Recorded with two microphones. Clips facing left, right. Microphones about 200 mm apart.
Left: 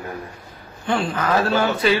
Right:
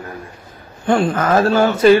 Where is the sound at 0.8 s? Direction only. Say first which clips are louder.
Right 6 dB; 50° right (ahead or behind).